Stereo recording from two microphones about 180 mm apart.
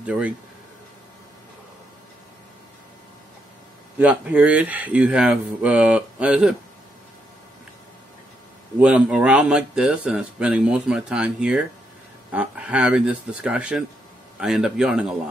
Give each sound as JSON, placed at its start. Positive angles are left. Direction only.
{"t": 0.0, "sound": "speech", "side_deg": -5}
{"t": 4.0, "sound": "speech", "side_deg": -5}
{"t": 8.7, "sound": "speech", "side_deg": -5}